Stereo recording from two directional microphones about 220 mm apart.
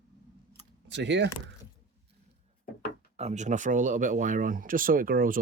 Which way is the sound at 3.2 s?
30° right (ahead or behind).